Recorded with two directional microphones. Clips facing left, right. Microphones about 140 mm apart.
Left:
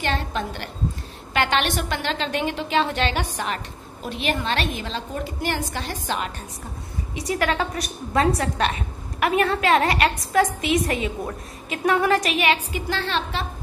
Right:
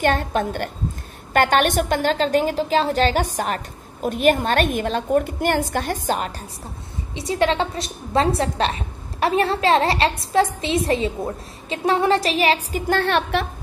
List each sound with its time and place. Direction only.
0.0 s a woman's voice: 50° right (ahead or behind)
7.2 s a woman's voice: 25° right (ahead or behind)
12.8 s a woman's voice: 55° right (ahead or behind)